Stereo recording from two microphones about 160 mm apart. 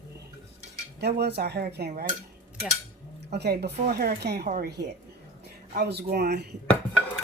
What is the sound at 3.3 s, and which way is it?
Speech, 90° right.